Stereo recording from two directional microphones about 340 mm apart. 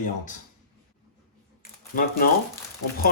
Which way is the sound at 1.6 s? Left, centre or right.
Left.